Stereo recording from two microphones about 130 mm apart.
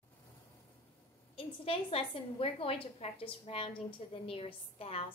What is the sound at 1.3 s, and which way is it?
A woman's voice, 45° left (ahead or behind).